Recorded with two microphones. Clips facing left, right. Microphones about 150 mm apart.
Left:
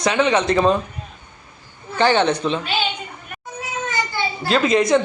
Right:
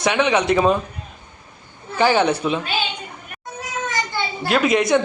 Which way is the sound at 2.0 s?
10° right (ahead or behind).